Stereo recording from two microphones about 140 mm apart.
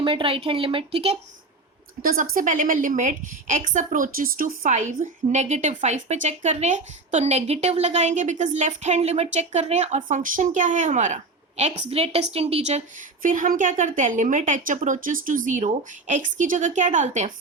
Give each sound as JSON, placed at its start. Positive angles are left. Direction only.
{"t": 0.0, "sound": "speech", "side_deg": -40}
{"t": 2.0, "sound": "a woman's voice", "side_deg": -85}
{"t": 13.2, "sound": "a woman's voice", "side_deg": -70}